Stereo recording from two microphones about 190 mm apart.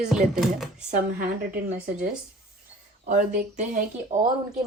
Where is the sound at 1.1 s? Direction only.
50° right (ahead or behind).